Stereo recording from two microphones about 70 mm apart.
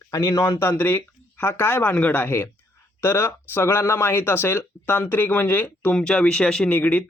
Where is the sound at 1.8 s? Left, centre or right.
Left.